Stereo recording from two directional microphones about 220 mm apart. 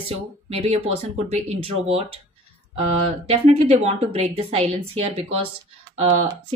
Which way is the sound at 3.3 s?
30° right (ahead or behind).